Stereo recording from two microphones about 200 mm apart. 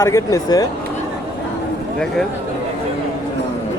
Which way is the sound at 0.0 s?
15° left (ahead or behind).